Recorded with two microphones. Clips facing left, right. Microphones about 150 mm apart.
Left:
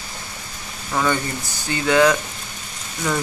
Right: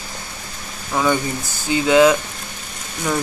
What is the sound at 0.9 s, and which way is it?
Speech, 10° right (ahead or behind).